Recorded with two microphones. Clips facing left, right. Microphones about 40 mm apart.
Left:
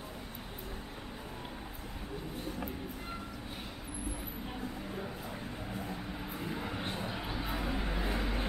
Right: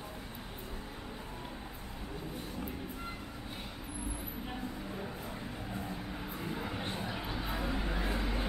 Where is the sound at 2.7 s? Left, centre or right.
Centre.